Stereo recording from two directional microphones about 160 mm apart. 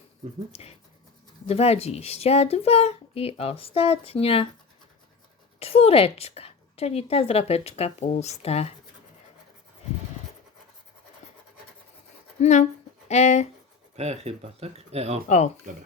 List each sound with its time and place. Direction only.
0.5 s a woman's voice: 40° left (ahead or behind)
5.5 s a woman's voice: 40° left (ahead or behind)
12.4 s speech: 45° left (ahead or behind)
13.9 s speech: 40° right (ahead or behind)